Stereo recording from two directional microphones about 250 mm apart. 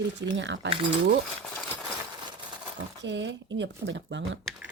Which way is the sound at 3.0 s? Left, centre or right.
Right.